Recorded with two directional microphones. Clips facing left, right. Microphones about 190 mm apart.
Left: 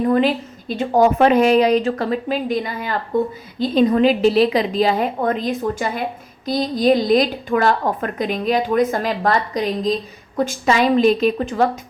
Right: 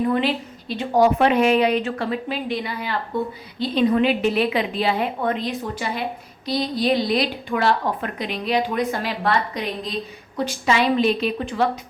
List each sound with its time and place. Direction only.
0.0 s a woman's voice: 40° left (ahead or behind)